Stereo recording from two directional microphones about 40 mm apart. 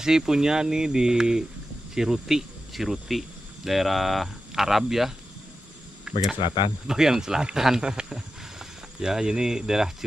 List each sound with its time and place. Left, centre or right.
0.0 s speech: centre
6.1 s speech: right
7.8 s speech: right